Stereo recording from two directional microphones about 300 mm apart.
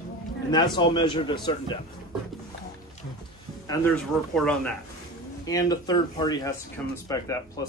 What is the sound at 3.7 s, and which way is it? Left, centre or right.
Speech, centre.